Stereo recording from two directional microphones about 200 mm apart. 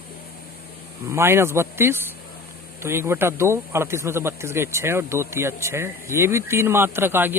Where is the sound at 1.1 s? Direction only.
10° right (ahead or behind).